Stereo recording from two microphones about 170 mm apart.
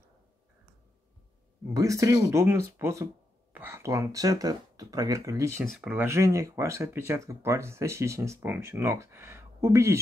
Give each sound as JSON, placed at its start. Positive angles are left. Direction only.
{"t": 1.7, "sound": "speech", "side_deg": -20}